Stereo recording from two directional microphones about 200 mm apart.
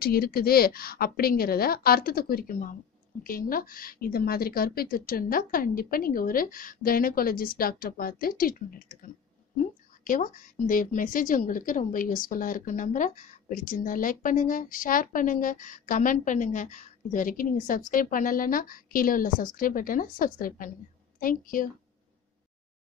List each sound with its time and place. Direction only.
0.0 s a woman's voice: 50° left (ahead or behind)
10.0 s a woman's voice: 45° left (ahead or behind)